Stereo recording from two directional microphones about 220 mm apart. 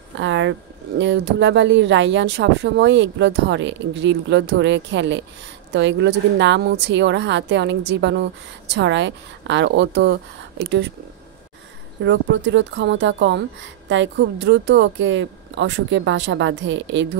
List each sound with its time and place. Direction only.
0.2 s a woman's voice: 55° right (ahead or behind)
12.0 s speech: 55° right (ahead or behind)